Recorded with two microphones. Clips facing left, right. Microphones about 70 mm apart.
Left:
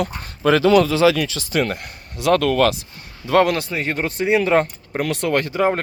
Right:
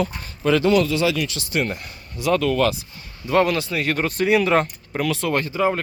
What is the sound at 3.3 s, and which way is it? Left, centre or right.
Speech, left.